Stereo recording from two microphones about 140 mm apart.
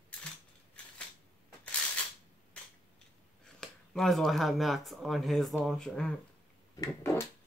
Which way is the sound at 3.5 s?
5° left (ahead or behind).